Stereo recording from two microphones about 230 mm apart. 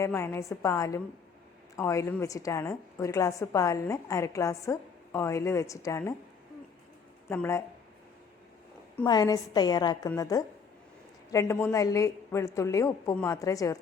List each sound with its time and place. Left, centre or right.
0.0 s a woman's voice: centre
7.3 s a woman's voice: centre
9.0 s a woman's voice: centre